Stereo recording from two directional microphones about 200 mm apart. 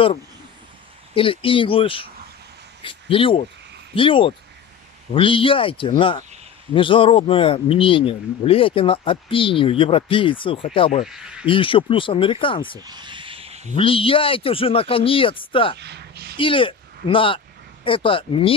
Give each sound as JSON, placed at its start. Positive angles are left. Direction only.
{"t": 1.1, "sound": "speech", "side_deg": 25}
{"t": 11.1, "sound": "speech", "side_deg": -5}
{"t": 11.4, "sound": "speech", "side_deg": 25}
{"t": 12.7, "sound": "snake", "side_deg": -20}
{"t": 13.7, "sound": "speech", "side_deg": 25}
{"t": 15.8, "sound": "a sound", "side_deg": -55}
{"t": 16.3, "sound": "speech", "side_deg": 25}